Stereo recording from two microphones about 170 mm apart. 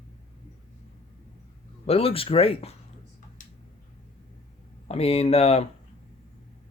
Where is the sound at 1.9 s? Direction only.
35° left (ahead or behind).